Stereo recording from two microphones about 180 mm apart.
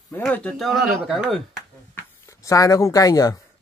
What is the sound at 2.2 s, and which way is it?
Speech, 20° left (ahead or behind).